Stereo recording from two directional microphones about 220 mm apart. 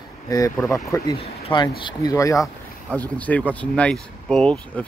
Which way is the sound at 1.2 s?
20° left (ahead or behind).